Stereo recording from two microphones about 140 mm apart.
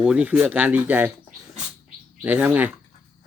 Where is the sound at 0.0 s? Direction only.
10° right (ahead or behind).